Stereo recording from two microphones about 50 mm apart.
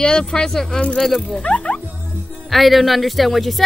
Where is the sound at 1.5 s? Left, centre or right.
Left.